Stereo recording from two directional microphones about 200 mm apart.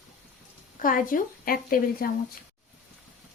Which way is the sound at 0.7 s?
45° left (ahead or behind).